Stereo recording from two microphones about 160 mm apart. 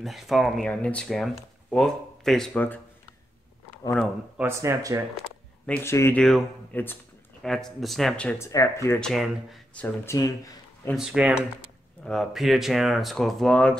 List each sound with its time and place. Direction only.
0.0 s speech: centre (ahead or behind)
4.4 s speech: 15° right (ahead or behind)
5.7 s speech: 15° left (ahead or behind)
6.2 s speech: centre (ahead or behind)
8.5 s speech: 20° left (ahead or behind)
9.0 s speech: centre (ahead or behind)
10.0 s speech: 20° left (ahead or behind)
11.0 s speech: 5° right (ahead or behind)